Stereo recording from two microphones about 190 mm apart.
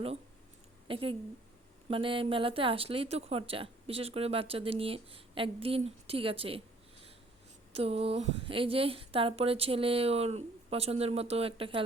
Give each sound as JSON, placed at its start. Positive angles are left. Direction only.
{"t": 0.9, "sound": "speech", "side_deg": -30}
{"t": 7.7, "sound": "speech", "side_deg": -30}